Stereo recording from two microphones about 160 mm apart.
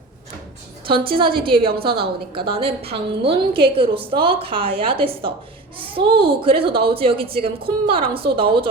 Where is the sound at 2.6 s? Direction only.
35° right (ahead or behind).